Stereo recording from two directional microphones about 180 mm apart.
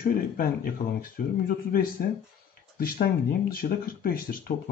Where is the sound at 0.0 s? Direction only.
55° left (ahead or behind).